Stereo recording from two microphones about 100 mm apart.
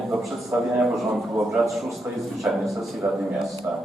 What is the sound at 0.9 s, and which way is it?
A man's voice, centre (ahead or behind).